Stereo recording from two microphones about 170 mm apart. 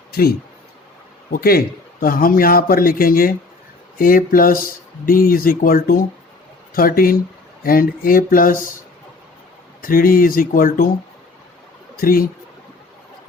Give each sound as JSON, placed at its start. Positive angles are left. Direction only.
{"t": 1.3, "sound": "a man's voice", "side_deg": 60}
{"t": 9.8, "sound": "a man's voice", "side_deg": 55}
{"t": 11.9, "sound": "speech", "side_deg": 60}